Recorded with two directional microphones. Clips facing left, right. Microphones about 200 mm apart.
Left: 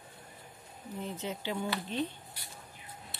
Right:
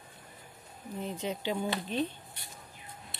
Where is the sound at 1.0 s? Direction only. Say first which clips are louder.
Right 3 dB; 10° right (ahead or behind).